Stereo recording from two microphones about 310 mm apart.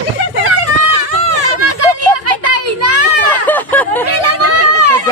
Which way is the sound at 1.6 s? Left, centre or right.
Right.